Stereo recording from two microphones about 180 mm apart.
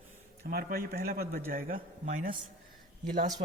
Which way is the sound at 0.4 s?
55° right (ahead or behind).